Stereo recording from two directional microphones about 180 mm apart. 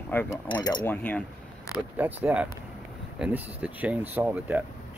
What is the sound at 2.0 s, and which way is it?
Speech, 10° right (ahead or behind).